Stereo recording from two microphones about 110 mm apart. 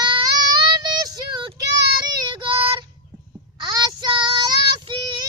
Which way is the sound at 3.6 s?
40° right (ahead or behind).